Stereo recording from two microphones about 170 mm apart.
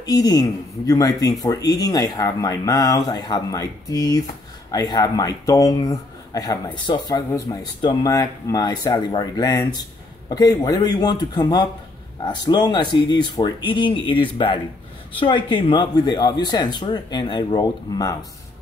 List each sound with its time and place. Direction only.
0.0 s speech: 20° left (ahead or behind)